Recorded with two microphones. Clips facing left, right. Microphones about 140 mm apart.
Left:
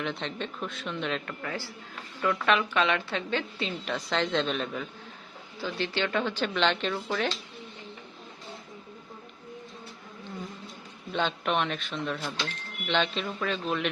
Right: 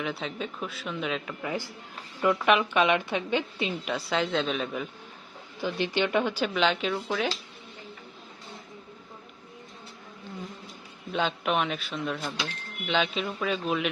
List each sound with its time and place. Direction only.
0.0 s speech: 5° right (ahead or behind)
5.5 s speech: 15° right (ahead or behind)
11.1 s speech: 5° right (ahead or behind)